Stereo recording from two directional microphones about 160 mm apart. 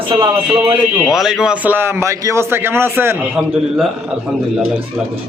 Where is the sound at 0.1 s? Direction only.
30° right (ahead or behind).